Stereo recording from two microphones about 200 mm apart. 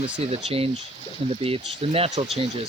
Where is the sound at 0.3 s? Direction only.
30° right (ahead or behind).